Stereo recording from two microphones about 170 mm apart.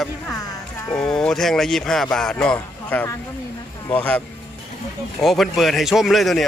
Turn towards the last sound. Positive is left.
turn(degrees=0)  # may be behind; listen again after turning